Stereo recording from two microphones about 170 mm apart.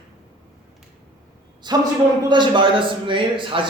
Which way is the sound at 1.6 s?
25° right (ahead or behind).